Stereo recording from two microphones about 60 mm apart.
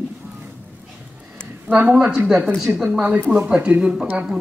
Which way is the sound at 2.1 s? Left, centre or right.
Centre.